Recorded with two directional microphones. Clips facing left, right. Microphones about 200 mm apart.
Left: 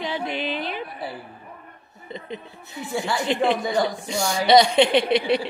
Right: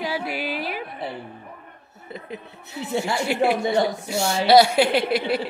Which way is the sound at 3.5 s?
25° right (ahead or behind).